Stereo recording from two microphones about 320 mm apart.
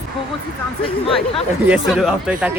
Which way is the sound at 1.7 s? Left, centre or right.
Centre.